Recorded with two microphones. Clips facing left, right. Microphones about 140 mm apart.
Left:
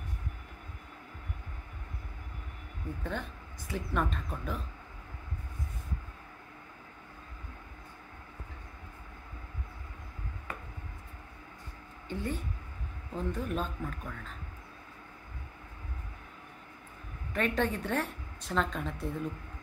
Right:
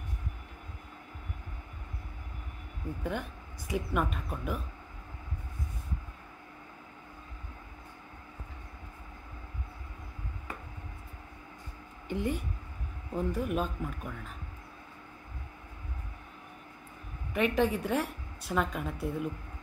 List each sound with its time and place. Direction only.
3.0 s speech: 10° right (ahead or behind)
12.1 s speech: 15° right (ahead or behind)
17.3 s speech: 10° right (ahead or behind)